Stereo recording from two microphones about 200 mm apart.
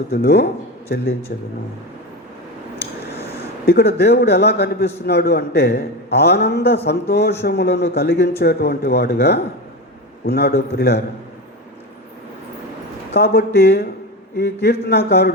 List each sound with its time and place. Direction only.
0.1 s speech: 55° left (ahead or behind)
3.7 s a man's voice: 55° left (ahead or behind)
13.1 s a man's voice: 55° left (ahead or behind)